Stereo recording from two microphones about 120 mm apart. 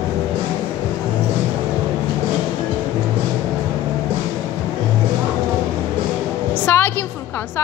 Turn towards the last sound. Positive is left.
turn(degrees=20)  # may be behind; listen again after turning